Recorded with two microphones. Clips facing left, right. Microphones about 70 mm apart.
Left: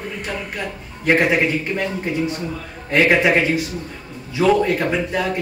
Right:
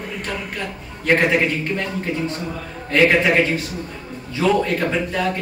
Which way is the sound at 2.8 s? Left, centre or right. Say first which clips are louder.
Even; centre.